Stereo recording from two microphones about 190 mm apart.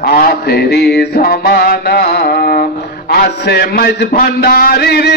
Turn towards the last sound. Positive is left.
turn(degrees=60)  # may be behind; listen again after turning